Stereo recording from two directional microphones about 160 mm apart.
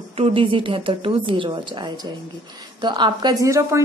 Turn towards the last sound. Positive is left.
turn(degrees=-20)  # may be behind; listen again after turning